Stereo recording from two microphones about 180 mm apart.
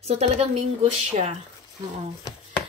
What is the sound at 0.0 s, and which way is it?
Speech, 35° right (ahead or behind).